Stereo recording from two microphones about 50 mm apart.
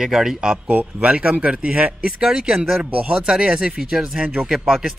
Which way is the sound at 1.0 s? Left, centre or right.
Right.